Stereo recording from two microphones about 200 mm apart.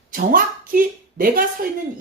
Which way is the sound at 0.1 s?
45° right (ahead or behind).